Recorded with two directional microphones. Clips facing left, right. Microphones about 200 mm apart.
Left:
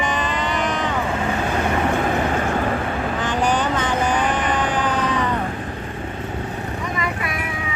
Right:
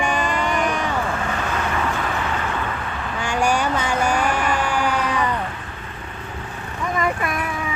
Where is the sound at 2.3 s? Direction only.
45° left (ahead or behind).